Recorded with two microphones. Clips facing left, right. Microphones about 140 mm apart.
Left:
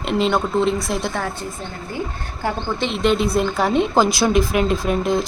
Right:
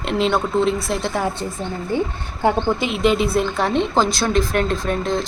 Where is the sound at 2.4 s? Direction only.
25° right (ahead or behind).